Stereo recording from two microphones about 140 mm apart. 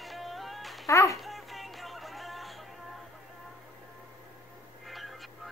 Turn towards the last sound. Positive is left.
turn(degrees=0)  # may be behind; listen again after turning